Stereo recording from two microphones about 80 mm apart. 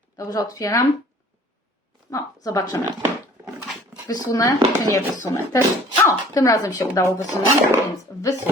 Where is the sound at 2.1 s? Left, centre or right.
Left.